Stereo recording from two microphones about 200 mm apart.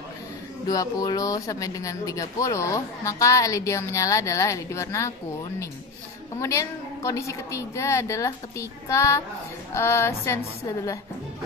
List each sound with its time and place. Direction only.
0.7 s speech: 15° left (ahead or behind)
6.4 s speech: 15° left (ahead or behind)